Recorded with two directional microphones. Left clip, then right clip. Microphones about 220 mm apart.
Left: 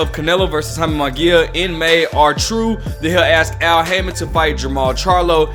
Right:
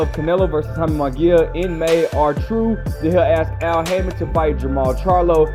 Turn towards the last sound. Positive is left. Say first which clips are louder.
# left 1 dB
turn(degrees=5)  # may be behind; listen again after turning